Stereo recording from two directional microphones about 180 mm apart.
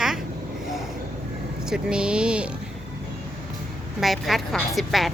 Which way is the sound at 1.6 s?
5° right (ahead or behind).